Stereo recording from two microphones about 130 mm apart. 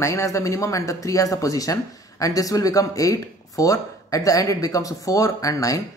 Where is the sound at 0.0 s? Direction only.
20° left (ahead or behind).